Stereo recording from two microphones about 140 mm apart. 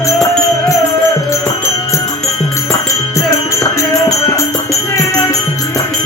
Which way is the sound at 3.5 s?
25° left (ahead or behind).